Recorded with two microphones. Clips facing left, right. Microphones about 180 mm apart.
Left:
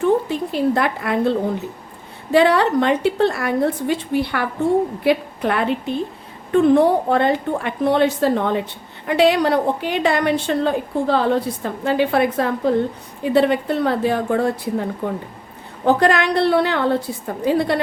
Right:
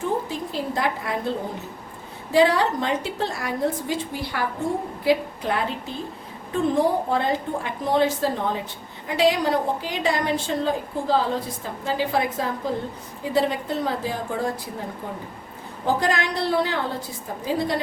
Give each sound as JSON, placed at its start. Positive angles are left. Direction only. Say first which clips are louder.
{"t": 0.0, "sound": "a woman's voice", "louder": "left 8 dB", "side_deg": 65}
{"t": 2.3, "sound": "a woman's voice", "louder": "left 4 dB", "side_deg": 65}
{"t": 15.9, "sound": "a woman's voice", "louder": "left 7 dB", "side_deg": 65}